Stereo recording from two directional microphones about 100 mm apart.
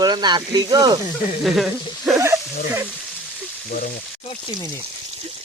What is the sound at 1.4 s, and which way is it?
Speech, centre (ahead or behind).